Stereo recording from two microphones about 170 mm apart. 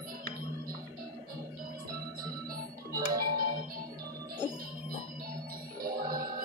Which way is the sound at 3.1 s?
60° right (ahead or behind).